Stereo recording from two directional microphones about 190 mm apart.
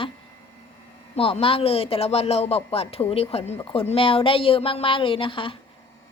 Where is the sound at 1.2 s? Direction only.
30° left (ahead or behind).